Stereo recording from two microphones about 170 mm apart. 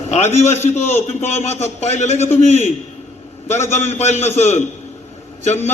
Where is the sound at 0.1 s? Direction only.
40° left (ahead or behind).